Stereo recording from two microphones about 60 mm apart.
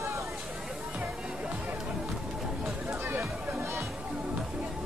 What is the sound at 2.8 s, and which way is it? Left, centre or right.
Music, right.